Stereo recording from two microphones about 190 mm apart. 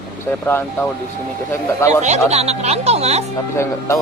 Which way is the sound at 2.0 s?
35° right (ahead or behind).